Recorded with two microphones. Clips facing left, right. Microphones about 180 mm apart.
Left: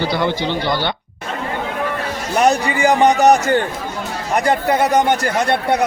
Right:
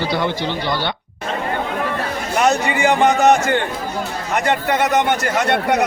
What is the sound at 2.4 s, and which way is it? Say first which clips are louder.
A man's voice: left 2 dB; 35° left (ahead or behind).